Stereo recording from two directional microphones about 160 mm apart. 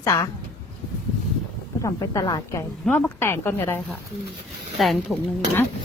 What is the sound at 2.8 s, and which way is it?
A woman's voice, 10° left (ahead or behind).